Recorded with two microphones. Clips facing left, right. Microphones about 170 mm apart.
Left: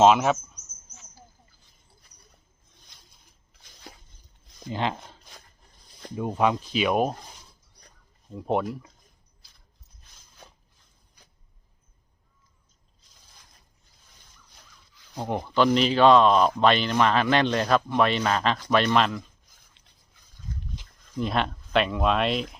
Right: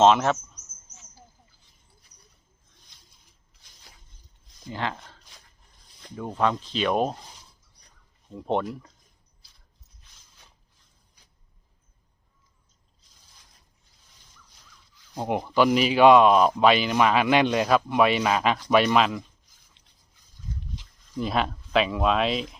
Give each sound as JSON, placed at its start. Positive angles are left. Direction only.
{"t": 0.0, "sound": "speech", "side_deg": 5}
{"t": 3.9, "sound": "a sound", "side_deg": 60}
{"t": 4.7, "sound": "speech", "side_deg": 20}
{"t": 8.3, "sound": "speech", "side_deg": 5}
{"t": 15.2, "sound": "speech", "side_deg": -15}
{"t": 19.5, "sound": "a sound", "side_deg": 50}
{"t": 21.2, "sound": "speech", "side_deg": 0}